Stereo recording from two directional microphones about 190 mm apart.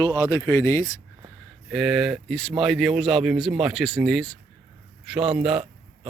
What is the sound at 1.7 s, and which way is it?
Speech, centre (ahead or behind).